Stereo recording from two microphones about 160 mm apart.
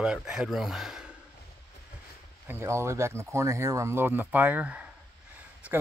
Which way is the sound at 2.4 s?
15° right (ahead or behind).